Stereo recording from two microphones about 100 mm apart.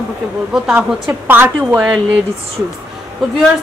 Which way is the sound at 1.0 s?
20° right (ahead or behind).